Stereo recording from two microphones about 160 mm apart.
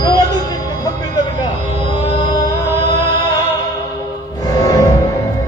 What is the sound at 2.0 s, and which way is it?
Music, 30° left (ahead or behind).